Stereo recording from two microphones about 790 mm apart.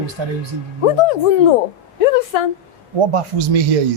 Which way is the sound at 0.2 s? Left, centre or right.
Right.